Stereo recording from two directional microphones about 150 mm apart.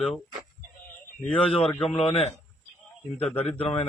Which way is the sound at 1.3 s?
5° left (ahead or behind).